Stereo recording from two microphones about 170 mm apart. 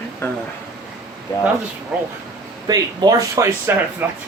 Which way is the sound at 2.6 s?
25° right (ahead or behind).